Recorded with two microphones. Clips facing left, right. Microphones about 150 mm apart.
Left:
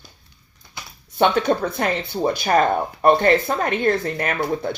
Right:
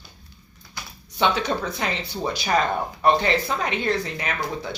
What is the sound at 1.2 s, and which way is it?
Speech, 50° left (ahead or behind).